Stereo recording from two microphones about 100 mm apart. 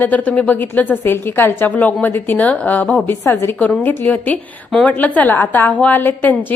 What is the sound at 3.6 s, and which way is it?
A woman's voice, 15° left (ahead or behind).